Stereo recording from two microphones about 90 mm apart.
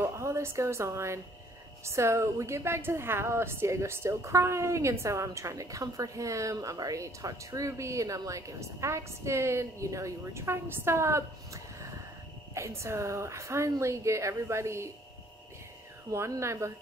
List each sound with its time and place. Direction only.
0.0 s a woman's voice: 30° right (ahead or behind)
16.1 s a woman's voice: 35° right (ahead or behind)